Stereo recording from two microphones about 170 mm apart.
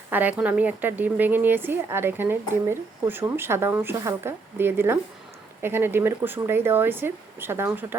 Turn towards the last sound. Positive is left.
turn(degrees=-10)  # may be behind; listen again after turning